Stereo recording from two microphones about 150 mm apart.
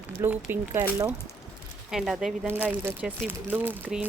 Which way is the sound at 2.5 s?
15° right (ahead or behind).